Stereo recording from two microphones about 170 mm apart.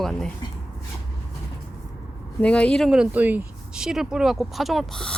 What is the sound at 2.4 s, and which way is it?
Speech, 5° left (ahead or behind).